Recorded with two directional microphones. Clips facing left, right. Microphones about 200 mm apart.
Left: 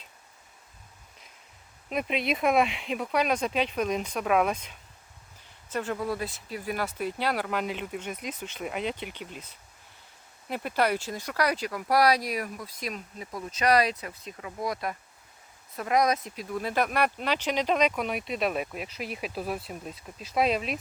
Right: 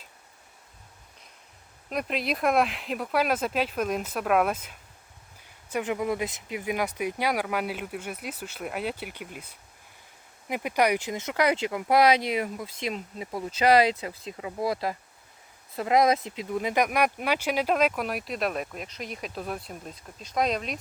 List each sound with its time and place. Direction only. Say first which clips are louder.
1.9 s speech: left 1 dB; centre (ahead or behind)